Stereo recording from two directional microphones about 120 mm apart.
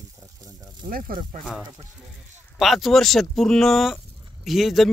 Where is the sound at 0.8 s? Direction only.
45° right (ahead or behind).